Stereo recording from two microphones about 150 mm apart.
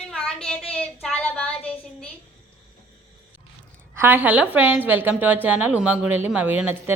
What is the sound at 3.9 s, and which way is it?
A woman's voice, 15° right (ahead or behind).